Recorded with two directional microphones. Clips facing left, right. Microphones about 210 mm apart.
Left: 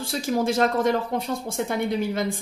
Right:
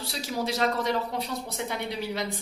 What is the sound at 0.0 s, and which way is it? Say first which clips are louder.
Speech: left 7 dB; 50° left (ahead or behind).